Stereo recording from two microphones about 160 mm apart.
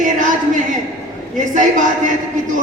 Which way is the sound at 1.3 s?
50° right (ahead or behind).